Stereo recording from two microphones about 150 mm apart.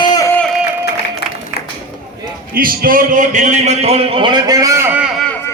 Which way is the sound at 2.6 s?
70° right (ahead or behind).